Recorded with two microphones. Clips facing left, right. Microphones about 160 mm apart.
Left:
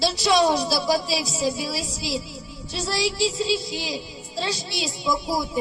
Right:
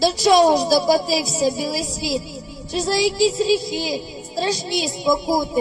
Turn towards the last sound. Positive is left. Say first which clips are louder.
# right 6 dB
turn(degrees=-40)  # may be behind; listen again after turning